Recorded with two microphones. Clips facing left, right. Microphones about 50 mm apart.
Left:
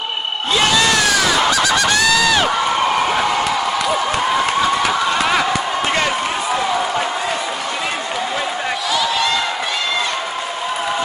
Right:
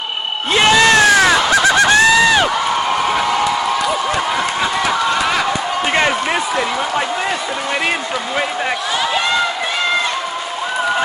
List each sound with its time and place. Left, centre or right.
0.5 s honk: right